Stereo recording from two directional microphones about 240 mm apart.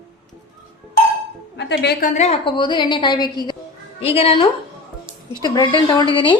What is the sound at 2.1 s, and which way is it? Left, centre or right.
A woman's voice, left.